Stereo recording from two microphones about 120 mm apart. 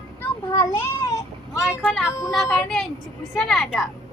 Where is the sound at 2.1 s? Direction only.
25° left (ahead or behind).